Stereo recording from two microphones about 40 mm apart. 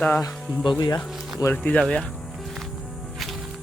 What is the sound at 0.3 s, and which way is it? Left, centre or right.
Speech, centre.